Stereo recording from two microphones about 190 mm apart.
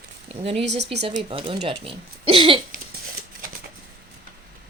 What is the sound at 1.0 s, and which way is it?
Speech, 30° right (ahead or behind).